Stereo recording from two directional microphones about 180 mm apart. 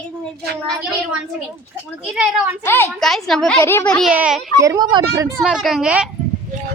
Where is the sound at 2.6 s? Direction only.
10° left (ahead or behind).